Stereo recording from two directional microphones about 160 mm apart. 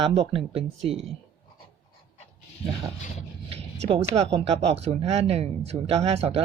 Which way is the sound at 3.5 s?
35° right (ahead or behind).